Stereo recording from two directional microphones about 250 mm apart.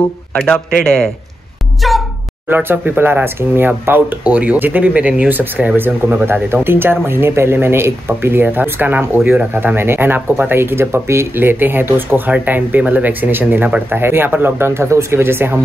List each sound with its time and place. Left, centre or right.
0.5 s a man's voice: centre